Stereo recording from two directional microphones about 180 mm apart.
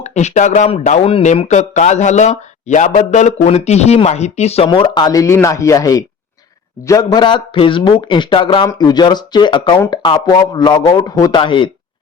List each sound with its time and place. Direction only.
0.0 s speech: 40° left (ahead or behind)